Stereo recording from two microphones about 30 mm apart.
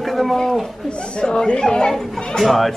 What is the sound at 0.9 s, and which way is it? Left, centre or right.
A woman's voice, left.